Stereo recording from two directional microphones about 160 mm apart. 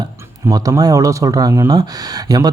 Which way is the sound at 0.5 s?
25° right (ahead or behind).